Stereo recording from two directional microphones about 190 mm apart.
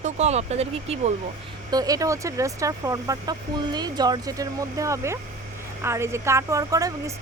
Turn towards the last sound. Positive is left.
turn(degrees=-20)  # may be behind; listen again after turning